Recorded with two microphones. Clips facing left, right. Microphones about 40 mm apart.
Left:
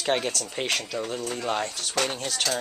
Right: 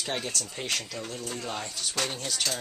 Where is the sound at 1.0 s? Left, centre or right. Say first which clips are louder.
Left 6 dB; left.